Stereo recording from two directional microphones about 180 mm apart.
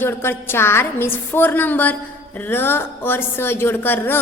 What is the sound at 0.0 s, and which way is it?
A woman's voice, 10° left (ahead or behind).